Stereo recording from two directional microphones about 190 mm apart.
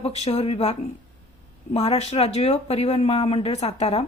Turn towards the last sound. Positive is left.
turn(degrees=30)  # may be behind; listen again after turning